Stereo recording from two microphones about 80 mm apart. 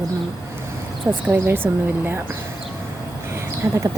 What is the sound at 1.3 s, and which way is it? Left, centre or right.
Speech, right.